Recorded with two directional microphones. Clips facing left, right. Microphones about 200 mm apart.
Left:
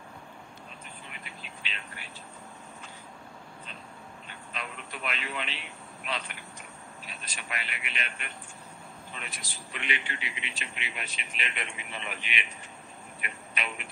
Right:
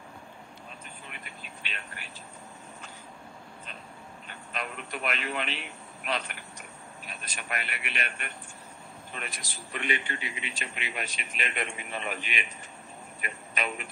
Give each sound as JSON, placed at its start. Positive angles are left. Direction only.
{"t": 4.3, "sound": "radio", "side_deg": -50}
{"t": 6.0, "sound": "a man's voice", "side_deg": -50}
{"t": 13.2, "sound": "a sound", "side_deg": -40}